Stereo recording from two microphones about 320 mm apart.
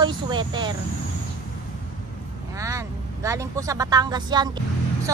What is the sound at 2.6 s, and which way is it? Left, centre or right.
Speech, centre.